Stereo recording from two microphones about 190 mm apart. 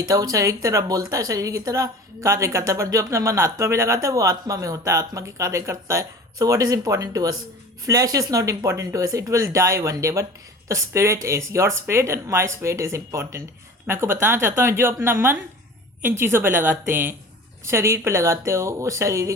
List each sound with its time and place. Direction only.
0.1 s a woman's voice: 20° right (ahead or behind)